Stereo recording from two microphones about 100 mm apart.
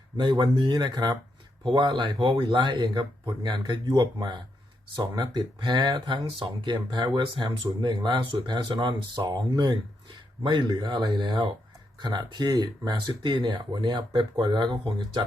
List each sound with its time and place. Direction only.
0.2 s speech: 45° right (ahead or behind)